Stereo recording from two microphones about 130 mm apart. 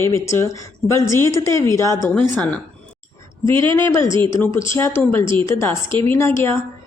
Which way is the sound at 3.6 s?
20° left (ahead or behind).